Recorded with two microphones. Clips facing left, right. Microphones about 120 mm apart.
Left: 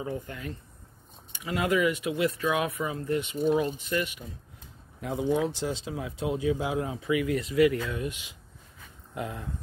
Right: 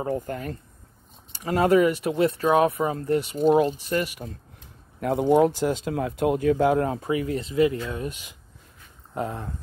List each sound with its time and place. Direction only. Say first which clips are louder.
0.0 s speech: right 7 dB; 45° right (ahead or behind)
3.5 s speech: right 6 dB; 50° right (ahead or behind)
7.1 s speech: right 1 dB; 35° right (ahead or behind)